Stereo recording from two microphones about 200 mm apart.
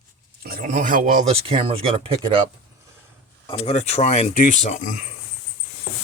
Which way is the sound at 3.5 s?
30° left (ahead or behind).